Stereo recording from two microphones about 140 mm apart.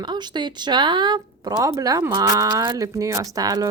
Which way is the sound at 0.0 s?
30° right (ahead or behind).